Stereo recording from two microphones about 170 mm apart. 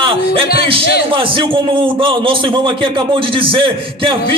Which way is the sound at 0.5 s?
35° right (ahead or behind).